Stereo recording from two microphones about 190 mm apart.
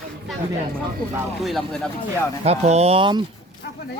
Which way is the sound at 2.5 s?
35° right (ahead or behind).